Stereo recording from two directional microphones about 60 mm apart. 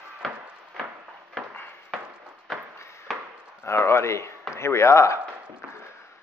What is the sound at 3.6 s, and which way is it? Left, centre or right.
Speech, left.